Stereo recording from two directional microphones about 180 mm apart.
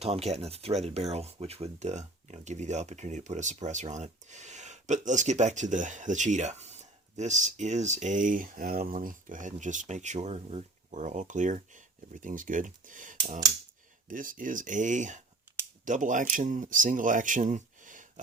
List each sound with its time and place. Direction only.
0.0 s speech: 35° right (ahead or behind)